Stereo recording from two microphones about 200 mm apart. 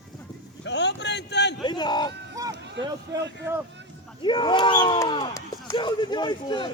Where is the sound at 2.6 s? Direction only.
60° right (ahead or behind).